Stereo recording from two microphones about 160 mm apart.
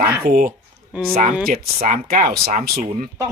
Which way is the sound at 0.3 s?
60° right (ahead or behind).